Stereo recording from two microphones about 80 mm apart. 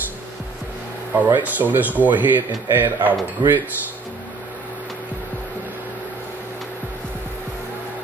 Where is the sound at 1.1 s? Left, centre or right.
Centre.